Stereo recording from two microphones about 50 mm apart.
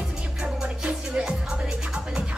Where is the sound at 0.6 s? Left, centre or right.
Right.